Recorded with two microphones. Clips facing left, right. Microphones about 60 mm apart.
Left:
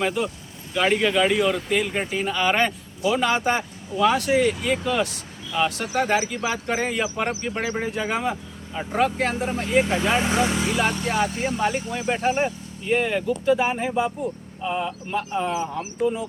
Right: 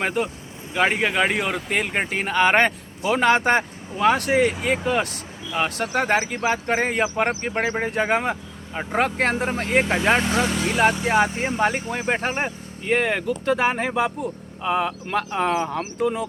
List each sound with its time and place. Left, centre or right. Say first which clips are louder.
0.0 s speech: even; right
3.9 s speech: right 1 dB; right
10.2 s speech: even; centre
11.3 s speech: right 2 dB; right
14.6 s speech: right 4 dB; right